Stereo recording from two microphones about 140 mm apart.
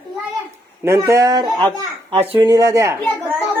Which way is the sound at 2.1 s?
40° right (ahead or behind).